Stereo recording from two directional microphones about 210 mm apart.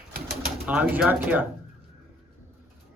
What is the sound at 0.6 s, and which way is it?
Speech, 10° right (ahead or behind).